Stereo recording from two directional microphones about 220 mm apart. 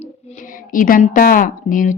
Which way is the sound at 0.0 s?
35° left (ahead or behind).